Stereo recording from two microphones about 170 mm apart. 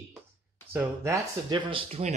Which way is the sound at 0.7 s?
10° right (ahead or behind).